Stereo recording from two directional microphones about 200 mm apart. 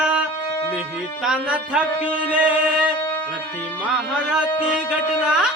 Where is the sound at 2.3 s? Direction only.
5° right (ahead or behind).